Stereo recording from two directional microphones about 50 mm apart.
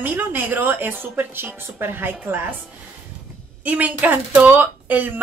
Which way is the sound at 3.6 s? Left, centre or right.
Right.